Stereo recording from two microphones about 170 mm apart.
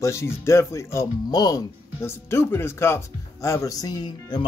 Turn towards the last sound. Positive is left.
turn(degrees=25)  # may be behind; listen again after turning